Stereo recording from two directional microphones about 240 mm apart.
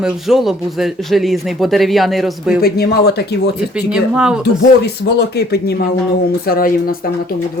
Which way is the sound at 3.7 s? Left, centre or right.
Centre.